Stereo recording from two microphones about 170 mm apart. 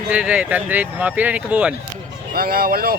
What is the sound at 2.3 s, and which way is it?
Speech, 60° right (ahead or behind).